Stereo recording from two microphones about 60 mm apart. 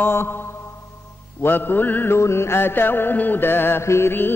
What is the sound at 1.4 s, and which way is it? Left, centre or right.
Music, left.